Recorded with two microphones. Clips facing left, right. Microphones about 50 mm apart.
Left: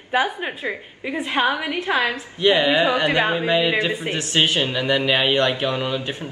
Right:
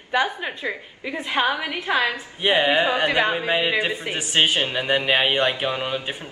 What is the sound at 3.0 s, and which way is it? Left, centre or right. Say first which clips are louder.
Speech: left 1 dB; centre.